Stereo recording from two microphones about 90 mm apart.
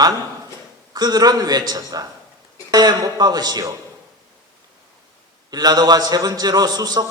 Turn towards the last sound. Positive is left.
turn(degrees=-50)  # may be behind; listen again after turning